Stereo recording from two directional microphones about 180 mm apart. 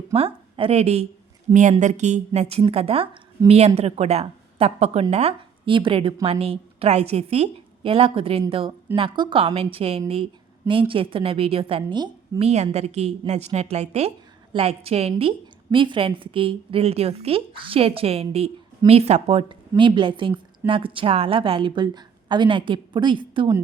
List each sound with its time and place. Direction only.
0.1 s a woman's voice: 30° right (ahead or behind)